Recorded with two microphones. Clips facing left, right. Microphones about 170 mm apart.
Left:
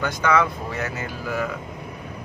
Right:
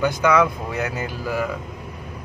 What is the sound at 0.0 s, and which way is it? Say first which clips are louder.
A man's voice: right 3 dB; 10° right (ahead or behind).